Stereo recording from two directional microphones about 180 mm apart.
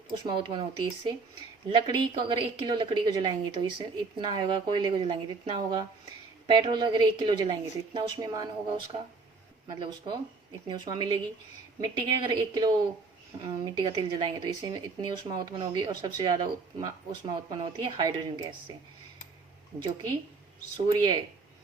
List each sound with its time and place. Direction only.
0.3 s speech: 25° right (ahead or behind)
19.8 s speech: 25° right (ahead or behind)